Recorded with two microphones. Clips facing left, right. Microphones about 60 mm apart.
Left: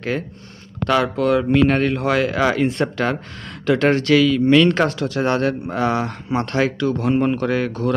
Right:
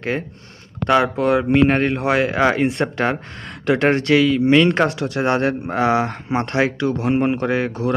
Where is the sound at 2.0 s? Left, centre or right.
Centre.